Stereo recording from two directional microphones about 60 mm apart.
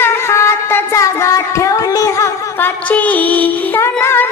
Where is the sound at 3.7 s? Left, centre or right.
Left.